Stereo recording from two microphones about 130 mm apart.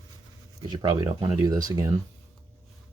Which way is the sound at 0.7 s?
30° right (ahead or behind).